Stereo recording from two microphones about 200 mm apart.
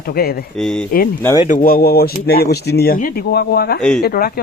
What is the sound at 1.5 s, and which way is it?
Speech, 45° left (ahead or behind).